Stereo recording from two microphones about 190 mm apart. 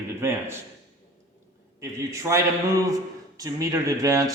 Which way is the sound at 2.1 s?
15° right (ahead or behind).